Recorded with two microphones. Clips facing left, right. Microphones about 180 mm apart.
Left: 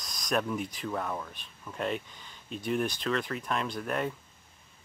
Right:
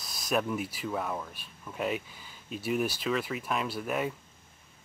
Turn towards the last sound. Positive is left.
turn(degrees=-5)  # may be behind; listen again after turning